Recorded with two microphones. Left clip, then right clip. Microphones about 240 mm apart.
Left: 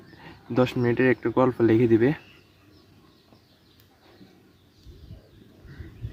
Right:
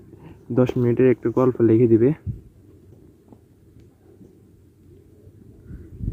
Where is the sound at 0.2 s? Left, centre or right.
Centre.